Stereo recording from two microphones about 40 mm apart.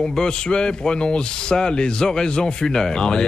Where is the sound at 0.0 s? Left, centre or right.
Centre.